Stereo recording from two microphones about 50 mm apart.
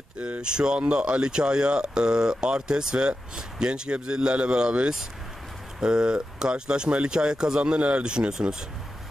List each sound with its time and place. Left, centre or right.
0.2 s speech: centre